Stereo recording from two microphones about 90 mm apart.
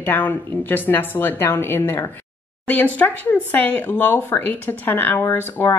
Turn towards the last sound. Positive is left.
turn(degrees=30)  # may be behind; listen again after turning